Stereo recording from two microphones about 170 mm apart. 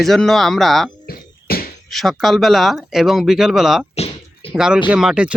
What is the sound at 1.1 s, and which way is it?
Music, 60° left (ahead or behind).